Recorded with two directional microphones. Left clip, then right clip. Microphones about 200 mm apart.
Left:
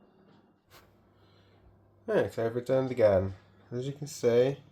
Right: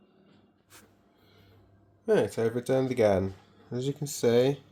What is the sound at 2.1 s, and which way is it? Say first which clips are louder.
Speech: right 3 dB; 45° right (ahead or behind).